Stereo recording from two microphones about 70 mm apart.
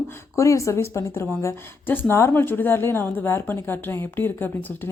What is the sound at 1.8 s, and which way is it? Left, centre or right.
Speech, left.